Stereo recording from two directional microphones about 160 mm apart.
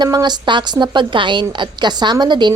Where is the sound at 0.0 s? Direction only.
25° right (ahead or behind).